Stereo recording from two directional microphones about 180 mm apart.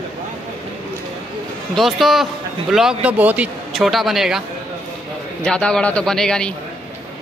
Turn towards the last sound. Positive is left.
turn(degrees=5)  # may be behind; listen again after turning